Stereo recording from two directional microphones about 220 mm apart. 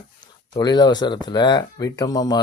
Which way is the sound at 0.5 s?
20° left (ahead or behind).